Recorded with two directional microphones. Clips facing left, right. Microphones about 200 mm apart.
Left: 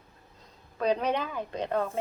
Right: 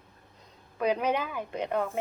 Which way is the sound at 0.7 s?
10° right (ahead or behind).